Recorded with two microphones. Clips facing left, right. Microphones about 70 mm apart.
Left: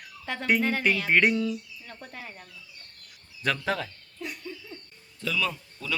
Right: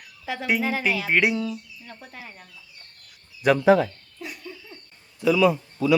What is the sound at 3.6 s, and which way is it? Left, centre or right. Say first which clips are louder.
Speech: right 12 dB; centre.